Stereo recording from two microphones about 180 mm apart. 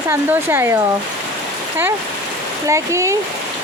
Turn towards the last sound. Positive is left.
turn(degrees=-15)  # may be behind; listen again after turning